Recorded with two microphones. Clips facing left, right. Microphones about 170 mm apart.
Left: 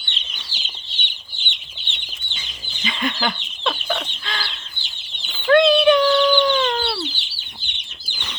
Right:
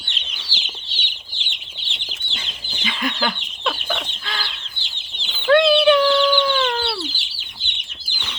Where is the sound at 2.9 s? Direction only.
Centre (ahead or behind).